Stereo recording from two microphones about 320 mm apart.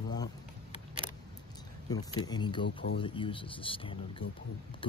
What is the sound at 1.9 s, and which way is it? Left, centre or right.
Speech, centre.